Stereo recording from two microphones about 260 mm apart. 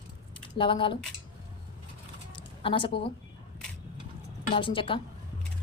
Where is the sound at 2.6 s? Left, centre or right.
Centre.